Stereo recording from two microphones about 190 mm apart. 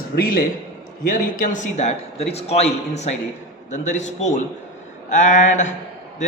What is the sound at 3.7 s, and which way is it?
A man's voice, 40° left (ahead or behind).